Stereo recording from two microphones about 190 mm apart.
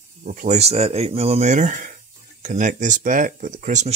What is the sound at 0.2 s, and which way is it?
Speech, 45° right (ahead or behind).